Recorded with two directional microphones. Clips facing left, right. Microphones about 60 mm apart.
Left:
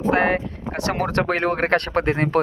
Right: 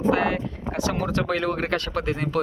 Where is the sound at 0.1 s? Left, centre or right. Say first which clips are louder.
Left 5 dB; left.